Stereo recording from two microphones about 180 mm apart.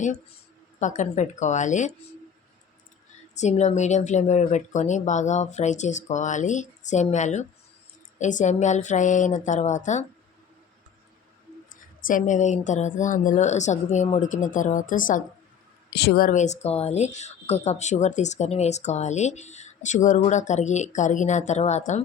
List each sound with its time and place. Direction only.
0.8 s a woman's voice: 45° left (ahead or behind)
3.3 s speech: 40° left (ahead or behind)
12.0 s a woman's voice: 45° left (ahead or behind)
16.0 s speech: 60° left (ahead or behind); by 22.0 s 40° left (ahead or behind)